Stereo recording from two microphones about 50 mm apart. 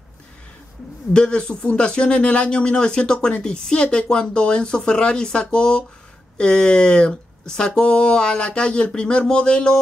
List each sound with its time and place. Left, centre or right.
1.1 s speech: centre